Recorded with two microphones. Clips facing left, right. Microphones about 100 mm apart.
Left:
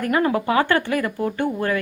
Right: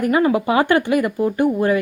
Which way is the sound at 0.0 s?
10° right (ahead or behind).